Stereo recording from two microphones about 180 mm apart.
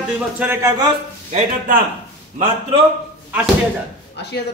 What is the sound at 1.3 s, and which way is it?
Speech, 50° right (ahead or behind).